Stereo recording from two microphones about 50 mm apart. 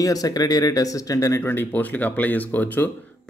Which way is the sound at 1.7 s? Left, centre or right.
Left.